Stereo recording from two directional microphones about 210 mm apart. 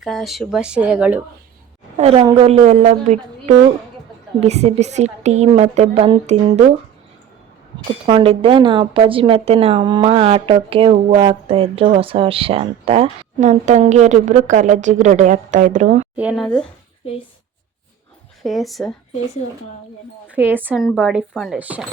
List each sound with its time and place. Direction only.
0.0 s speech: centre (ahead or behind)
2.0 s a woman's voice: 30° right (ahead or behind)
8.0 s a woman's voice: 25° right (ahead or behind)
16.1 s speech: 5° right (ahead or behind)
18.4 s speech: centre (ahead or behind)
20.3 s speech: 10° right (ahead or behind)